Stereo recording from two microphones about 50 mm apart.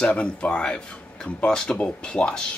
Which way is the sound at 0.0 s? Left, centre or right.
Left.